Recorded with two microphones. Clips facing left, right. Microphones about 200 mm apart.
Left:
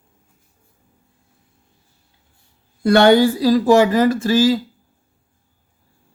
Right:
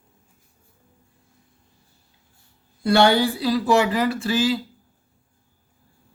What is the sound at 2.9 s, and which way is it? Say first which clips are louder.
Speech: left 6 dB; 50° left (ahead or behind).